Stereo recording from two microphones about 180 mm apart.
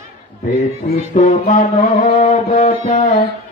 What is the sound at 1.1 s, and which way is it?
Music, 45° left (ahead or behind).